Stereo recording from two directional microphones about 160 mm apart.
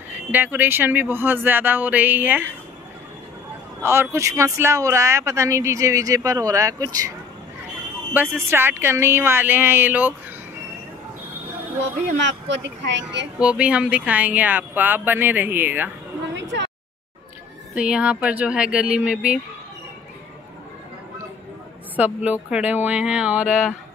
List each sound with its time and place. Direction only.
0.1 s speech: 10° right (ahead or behind)
3.8 s speech: 15° right (ahead or behind)
8.1 s speech: 15° right (ahead or behind)
11.8 s speech: 90° right
13.4 s speech: 5° right (ahead or behind)
17.7 s speech: 5° right (ahead or behind)
21.9 s speech: 10° right (ahead or behind)